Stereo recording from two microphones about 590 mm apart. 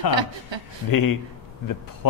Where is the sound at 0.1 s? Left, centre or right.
Right.